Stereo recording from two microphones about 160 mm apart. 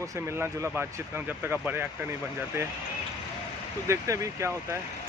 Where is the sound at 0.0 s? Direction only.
20° right (ahead or behind).